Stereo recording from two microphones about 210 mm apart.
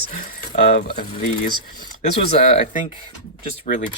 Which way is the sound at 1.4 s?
35° left (ahead or behind).